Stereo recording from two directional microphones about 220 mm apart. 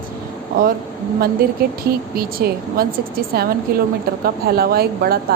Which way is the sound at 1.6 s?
45° right (ahead or behind).